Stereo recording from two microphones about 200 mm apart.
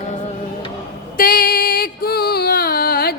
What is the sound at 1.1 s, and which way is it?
Music, 45° left (ahead or behind).